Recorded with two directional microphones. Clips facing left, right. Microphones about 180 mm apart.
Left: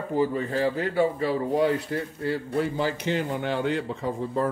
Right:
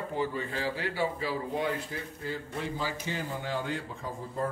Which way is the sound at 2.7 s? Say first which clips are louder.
Left 8 dB; 70° left (ahead or behind).